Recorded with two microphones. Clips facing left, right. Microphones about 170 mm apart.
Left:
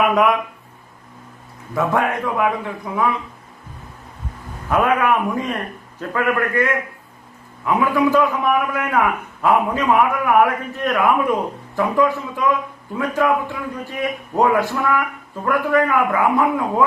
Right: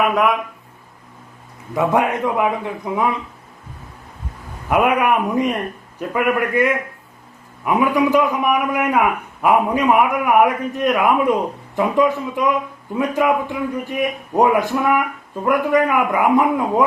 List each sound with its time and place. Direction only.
0.0 s speech: centre (ahead or behind)
1.7 s a man's voice: 20° right (ahead or behind)
4.7 s a man's voice: 15° right (ahead or behind)